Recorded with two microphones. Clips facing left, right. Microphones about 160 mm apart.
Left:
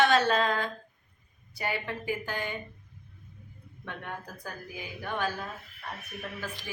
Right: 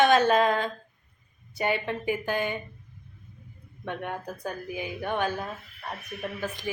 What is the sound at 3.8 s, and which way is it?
A woman's voice, 20° right (ahead or behind).